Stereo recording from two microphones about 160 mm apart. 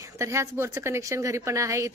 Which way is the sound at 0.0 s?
20° right (ahead or behind).